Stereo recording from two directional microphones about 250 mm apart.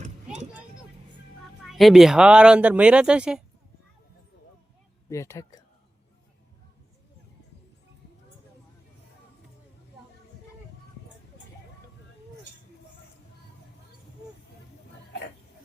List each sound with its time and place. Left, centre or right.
1.6 s speech: centre
5.0 s speech: centre